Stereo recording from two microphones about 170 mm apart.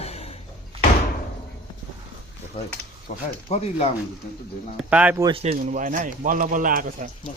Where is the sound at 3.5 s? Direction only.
35° left (ahead or behind).